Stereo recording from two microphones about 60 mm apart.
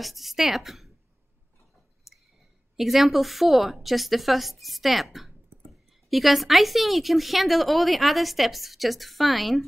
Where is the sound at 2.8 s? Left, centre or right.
Centre.